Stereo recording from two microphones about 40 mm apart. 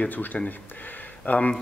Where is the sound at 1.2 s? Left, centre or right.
Left.